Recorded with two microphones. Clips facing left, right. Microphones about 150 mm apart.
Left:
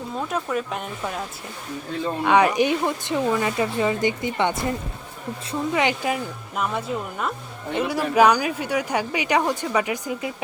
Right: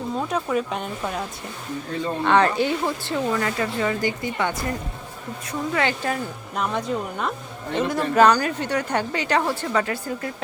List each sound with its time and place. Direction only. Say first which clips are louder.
0.2 s speech: right 1 dB; centre (ahead or behind)
2.2 s speech: left 1 dB; 10° left (ahead or behind)